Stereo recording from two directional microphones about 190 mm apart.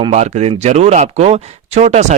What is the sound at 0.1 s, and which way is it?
A man's voice, 35° right (ahead or behind).